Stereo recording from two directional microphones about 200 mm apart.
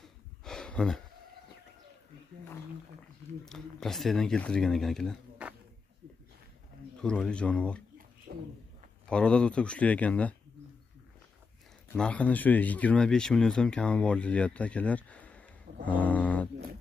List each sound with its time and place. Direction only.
0.0 s a sound: centre (ahead or behind)
3.4 s speech: centre (ahead or behind)
7.0 s speech: 5° left (ahead or behind)
8.3 s a sound: 50° right (ahead or behind)
9.1 s speech: 5° left (ahead or behind)
11.9 s speech: 5° left (ahead or behind)